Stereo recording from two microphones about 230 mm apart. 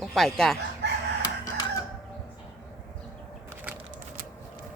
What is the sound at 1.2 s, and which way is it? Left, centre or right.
Chicken, centre.